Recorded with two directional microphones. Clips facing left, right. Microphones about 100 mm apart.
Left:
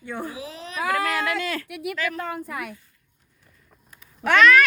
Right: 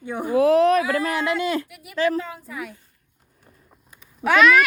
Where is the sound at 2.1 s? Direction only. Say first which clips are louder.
Right 2 dB; 55° left (ahead or behind).